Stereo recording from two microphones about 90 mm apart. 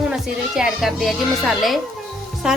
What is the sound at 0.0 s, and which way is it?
A woman's voice, 5° right (ahead or behind).